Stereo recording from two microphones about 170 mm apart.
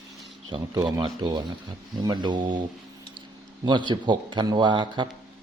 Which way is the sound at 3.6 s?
25° right (ahead or behind).